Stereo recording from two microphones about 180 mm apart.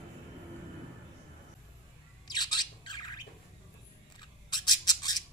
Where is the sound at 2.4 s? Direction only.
25° left (ahead or behind).